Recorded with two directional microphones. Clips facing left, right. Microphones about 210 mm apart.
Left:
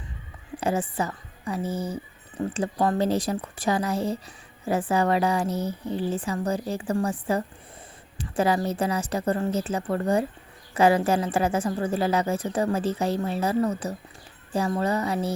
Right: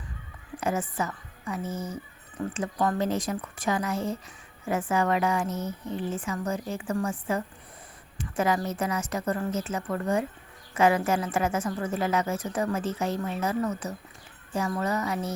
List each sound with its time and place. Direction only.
0.6 s a woman's voice: 30° left (ahead or behind)